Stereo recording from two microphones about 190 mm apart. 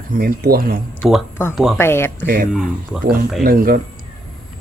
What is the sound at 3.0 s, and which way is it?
Speech, 50° right (ahead or behind).